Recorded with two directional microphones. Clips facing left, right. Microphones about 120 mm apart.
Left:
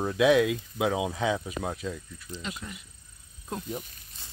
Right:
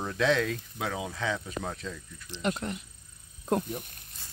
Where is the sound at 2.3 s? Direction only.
60° right (ahead or behind).